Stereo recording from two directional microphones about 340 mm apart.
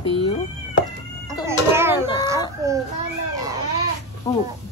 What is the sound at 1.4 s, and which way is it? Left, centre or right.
Speech, centre.